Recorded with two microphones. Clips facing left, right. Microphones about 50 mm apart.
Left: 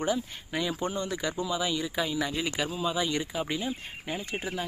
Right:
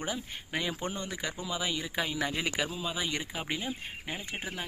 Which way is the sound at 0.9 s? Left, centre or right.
Centre.